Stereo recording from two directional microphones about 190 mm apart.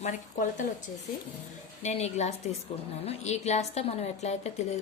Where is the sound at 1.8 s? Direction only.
35° left (ahead or behind).